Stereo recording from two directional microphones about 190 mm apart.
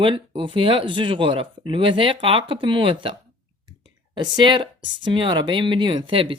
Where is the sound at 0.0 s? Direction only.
25° right (ahead or behind).